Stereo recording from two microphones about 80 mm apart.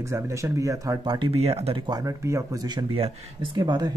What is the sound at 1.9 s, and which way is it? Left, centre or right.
Speech, right.